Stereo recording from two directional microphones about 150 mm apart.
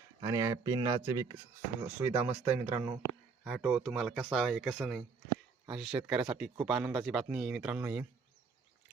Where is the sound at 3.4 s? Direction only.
Centre (ahead or behind).